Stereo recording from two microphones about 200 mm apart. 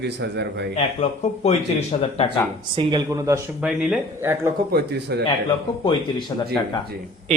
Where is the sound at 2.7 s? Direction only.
20° right (ahead or behind).